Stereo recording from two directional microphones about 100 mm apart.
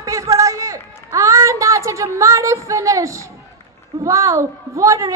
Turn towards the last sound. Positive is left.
turn(degrees=-35)  # may be behind; listen again after turning